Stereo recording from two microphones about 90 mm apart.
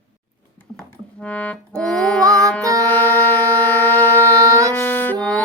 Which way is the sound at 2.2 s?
40° right (ahead or behind).